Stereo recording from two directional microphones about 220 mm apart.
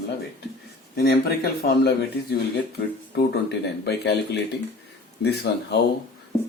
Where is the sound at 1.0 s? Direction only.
45° left (ahead or behind).